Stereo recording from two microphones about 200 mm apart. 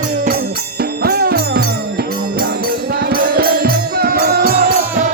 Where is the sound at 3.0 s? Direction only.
50° right (ahead or behind).